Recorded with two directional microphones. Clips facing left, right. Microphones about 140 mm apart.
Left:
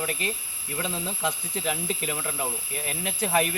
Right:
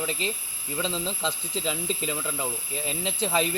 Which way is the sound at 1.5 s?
25° right (ahead or behind).